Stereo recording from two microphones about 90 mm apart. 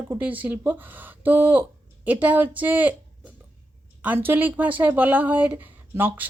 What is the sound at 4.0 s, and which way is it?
Speech, 20° right (ahead or behind).